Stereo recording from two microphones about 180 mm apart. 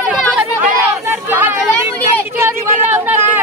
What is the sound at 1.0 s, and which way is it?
Speech, 15° right (ahead or behind).